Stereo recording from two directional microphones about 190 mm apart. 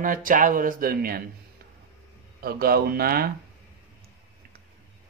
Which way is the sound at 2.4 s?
50° right (ahead or behind).